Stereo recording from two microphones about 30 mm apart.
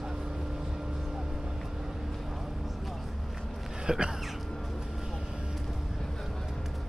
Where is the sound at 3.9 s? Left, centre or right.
Right.